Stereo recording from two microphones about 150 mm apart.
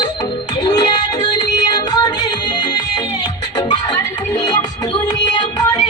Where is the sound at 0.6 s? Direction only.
25° left (ahead or behind).